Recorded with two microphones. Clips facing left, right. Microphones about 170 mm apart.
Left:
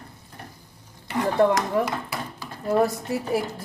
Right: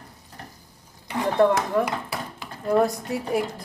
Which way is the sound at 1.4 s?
Centre (ahead or behind).